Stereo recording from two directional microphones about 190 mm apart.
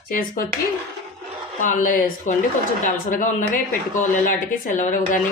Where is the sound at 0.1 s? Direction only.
45° left (ahead or behind).